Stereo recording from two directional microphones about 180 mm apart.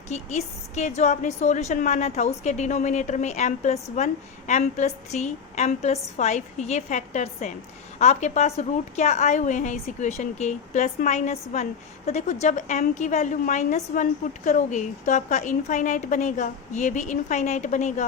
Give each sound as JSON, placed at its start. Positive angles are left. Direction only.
{"t": 0.1, "sound": "a woman's voice", "side_deg": 40}